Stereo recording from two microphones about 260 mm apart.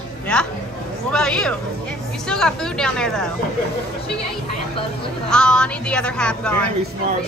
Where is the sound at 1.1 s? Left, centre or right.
Centre.